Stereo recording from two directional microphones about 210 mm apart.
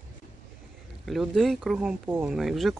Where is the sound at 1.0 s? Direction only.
Centre (ahead or behind).